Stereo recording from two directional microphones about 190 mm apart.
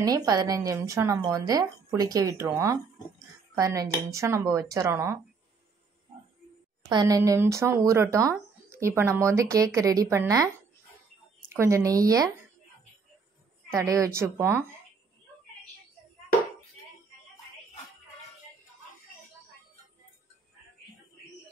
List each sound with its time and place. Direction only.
0.0 s speech: 20° right (ahead or behind)
6.9 s speech: 20° right (ahead or behind)
13.7 s speech: 15° right (ahead or behind)